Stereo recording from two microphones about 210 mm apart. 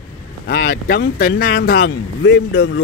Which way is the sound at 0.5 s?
45° left (ahead or behind).